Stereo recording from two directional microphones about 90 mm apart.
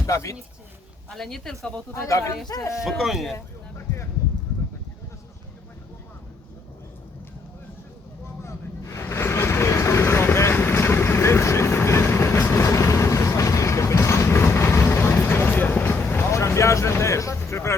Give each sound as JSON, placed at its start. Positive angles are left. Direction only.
{"t": 0.0, "sound": "speech", "side_deg": 35}
{"t": 1.1, "sound": "speech", "side_deg": 5}
{"t": 1.9, "sound": "speech", "side_deg": 35}
{"t": 2.8, "sound": "speech", "side_deg": -5}
{"t": 3.3, "sound": "a sound", "side_deg": 30}
{"t": 8.4, "sound": "vehicle", "side_deg": 30}